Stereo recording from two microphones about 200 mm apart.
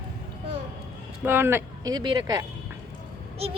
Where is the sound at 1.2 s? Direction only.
10° right (ahead or behind).